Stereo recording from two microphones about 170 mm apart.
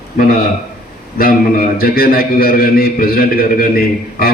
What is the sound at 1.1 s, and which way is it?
A man's voice, 60° left (ahead or behind).